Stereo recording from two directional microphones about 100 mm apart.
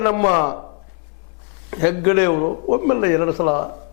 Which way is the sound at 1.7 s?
15° left (ahead or behind).